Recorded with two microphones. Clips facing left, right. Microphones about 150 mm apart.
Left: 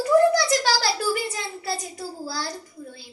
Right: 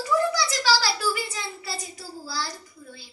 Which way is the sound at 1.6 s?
50° left (ahead or behind).